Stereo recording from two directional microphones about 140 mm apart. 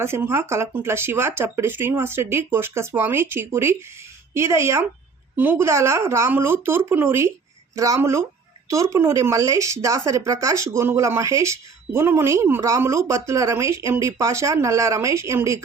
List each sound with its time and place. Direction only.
0.0 s speech: 15° right (ahead or behind)